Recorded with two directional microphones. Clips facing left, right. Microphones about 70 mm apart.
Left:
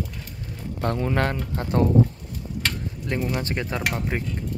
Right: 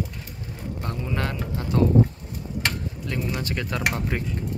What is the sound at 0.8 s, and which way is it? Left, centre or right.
A man's voice, left.